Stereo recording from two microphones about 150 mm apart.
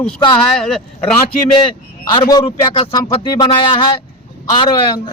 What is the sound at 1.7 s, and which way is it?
A man's voice, 30° left (ahead or behind).